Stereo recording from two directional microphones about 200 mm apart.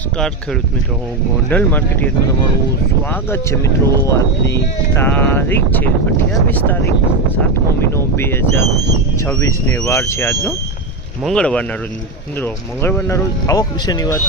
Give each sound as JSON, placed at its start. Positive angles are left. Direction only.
{"t": 1.5, "sound": "speech", "side_deg": 10}
{"t": 3.1, "sound": "speech", "side_deg": 10}
{"t": 7.9, "sound": "speech", "side_deg": 10}